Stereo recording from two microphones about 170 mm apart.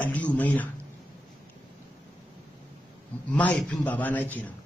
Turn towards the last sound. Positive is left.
turn(degrees=10)  # may be behind; listen again after turning